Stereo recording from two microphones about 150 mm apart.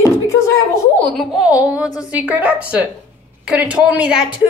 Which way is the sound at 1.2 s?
Centre (ahead or behind).